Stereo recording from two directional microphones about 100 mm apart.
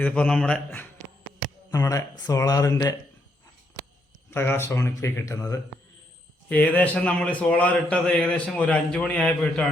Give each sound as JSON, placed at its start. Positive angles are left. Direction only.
{"t": 0.0, "sound": "a man's voice", "side_deg": 15}
{"t": 1.7, "sound": "speech", "side_deg": 35}
{"t": 4.3, "sound": "speech", "side_deg": 25}
{"t": 6.5, "sound": "a man's voice", "side_deg": 15}